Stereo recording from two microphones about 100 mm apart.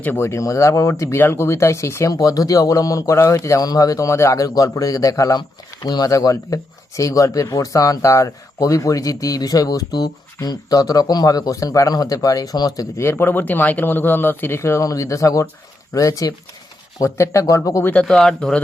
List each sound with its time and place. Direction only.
0.0 s speech: 25° left (ahead or behind)
2.1 s speech: 40° left (ahead or behind)
13.0 s speech: 25° left (ahead or behind)
18.0 s speech: 5° left (ahead or behind)